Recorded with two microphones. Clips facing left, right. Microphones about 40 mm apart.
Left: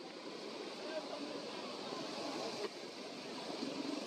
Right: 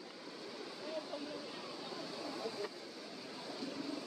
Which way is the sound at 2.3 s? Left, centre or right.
Left.